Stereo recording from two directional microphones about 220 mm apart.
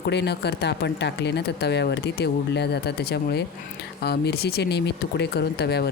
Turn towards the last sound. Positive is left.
turn(degrees=50)  # may be behind; listen again after turning